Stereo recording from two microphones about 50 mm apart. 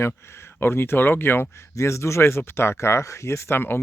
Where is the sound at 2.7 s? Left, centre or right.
Left.